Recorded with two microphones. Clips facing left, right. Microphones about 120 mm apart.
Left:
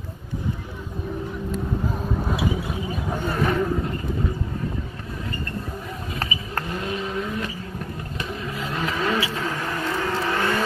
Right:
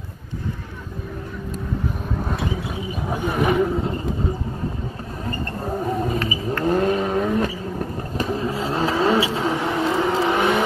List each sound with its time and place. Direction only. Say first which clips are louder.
2.2 s vehicle: left 2 dB; 5° left (ahead or behind)
3.1 s roaring cats: right 3 dB; 10° right (ahead or behind)
5.7 s wild animals: right 10 dB; 45° right (ahead or behind)
6.6 s vehicle: right 10 dB; 45° right (ahead or behind)
7.4 s vehicle: right 6 dB; 35° right (ahead or behind); by 10.6 s 20° right (ahead or behind)